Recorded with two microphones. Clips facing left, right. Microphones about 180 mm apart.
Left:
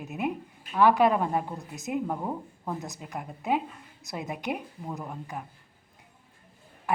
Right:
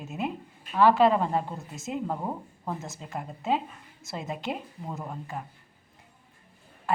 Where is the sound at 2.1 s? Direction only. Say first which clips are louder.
Even; 5° right (ahead or behind).